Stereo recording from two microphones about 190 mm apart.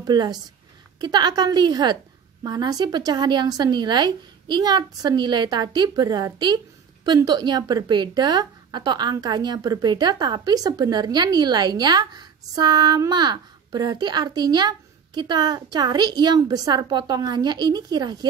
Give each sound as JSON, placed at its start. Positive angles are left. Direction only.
{"t": 0.0, "sound": "a woman's voice", "side_deg": -20}